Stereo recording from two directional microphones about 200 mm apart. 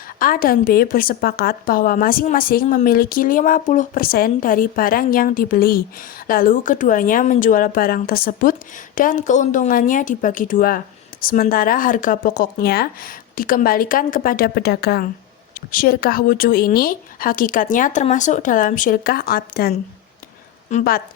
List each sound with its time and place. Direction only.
0.2 s a woman's voice: 45° left (ahead or behind)